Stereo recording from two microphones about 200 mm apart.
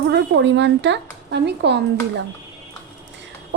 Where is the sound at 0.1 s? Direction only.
65° right (ahead or behind).